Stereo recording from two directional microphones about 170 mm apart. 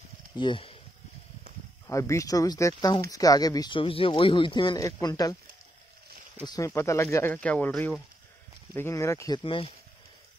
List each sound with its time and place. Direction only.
0.4 s speech: 30° left (ahead or behind)
1.9 s speech: 20° left (ahead or behind)
6.4 s speech: 20° left (ahead or behind)
9.4 s speech: 30° left (ahead or behind)